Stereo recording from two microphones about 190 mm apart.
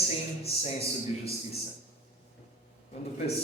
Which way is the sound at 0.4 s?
30° left (ahead or behind).